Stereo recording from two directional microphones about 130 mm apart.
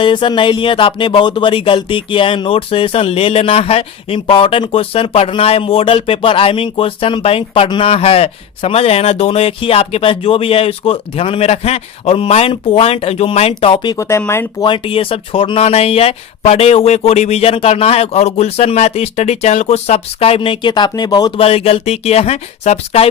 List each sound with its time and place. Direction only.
0.0 s speech: 40° left (ahead or behind)
13.8 s speech: 25° left (ahead or behind)
14.6 s speech: 45° left (ahead or behind)
21.4 s speech: 50° left (ahead or behind)